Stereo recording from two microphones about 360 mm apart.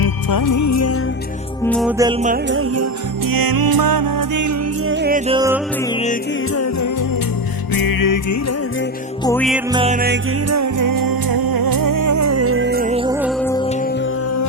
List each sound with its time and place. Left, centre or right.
0.0 s music: left
1.6 s music: centre
2.2 s music: right
3.2 s music: right
4.9 s music: right
5.3 s music: centre
6.5 s music: left
7.7 s music: left
9.2 s music: centre
9.7 s music: centre
10.5 s music: right; by 13.1 s centre
13.2 s music: centre